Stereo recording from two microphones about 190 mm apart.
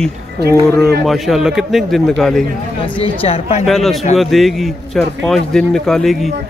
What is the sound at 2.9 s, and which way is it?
Speech, 30° left (ahead or behind).